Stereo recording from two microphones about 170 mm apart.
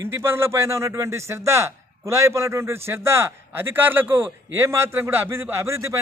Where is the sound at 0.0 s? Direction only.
15° right (ahead or behind).